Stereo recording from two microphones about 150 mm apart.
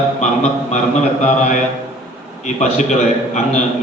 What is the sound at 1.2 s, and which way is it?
A man's voice, 50° left (ahead or behind).